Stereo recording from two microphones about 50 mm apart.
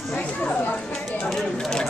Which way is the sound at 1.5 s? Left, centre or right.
Centre.